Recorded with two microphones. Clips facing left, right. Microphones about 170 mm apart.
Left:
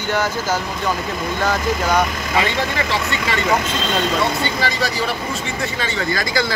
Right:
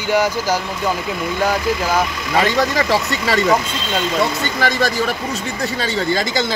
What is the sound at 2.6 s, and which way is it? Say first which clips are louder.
Speech: right 4 dB; 40° right (ahead or behind).